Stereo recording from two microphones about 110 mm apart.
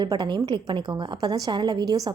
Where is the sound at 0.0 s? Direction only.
45° right (ahead or behind).